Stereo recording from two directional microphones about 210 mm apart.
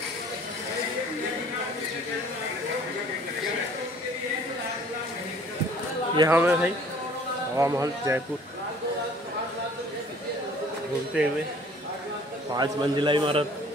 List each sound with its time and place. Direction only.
6.1 s speech: 15° right (ahead or behind)
12.5 s a man's voice: 20° right (ahead or behind)